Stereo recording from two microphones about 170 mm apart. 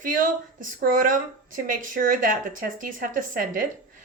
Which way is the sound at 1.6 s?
55° right (ahead or behind).